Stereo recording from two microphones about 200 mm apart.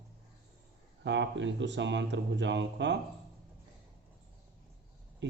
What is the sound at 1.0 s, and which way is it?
Speech, 65° right (ahead or behind).